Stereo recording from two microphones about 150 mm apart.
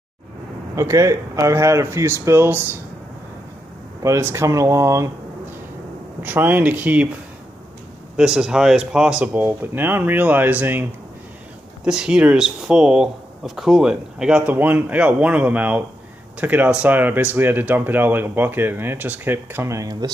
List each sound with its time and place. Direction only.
0.7 s speech: 20° right (ahead or behind)
4.0 s speech: 20° right (ahead or behind)
6.2 s speech: 15° right (ahead or behind)
8.2 s speech: 5° right (ahead or behind); by 20.1 s 25° right (ahead or behind)